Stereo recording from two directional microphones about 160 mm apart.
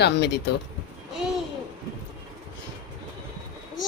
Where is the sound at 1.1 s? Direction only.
5° right (ahead or behind).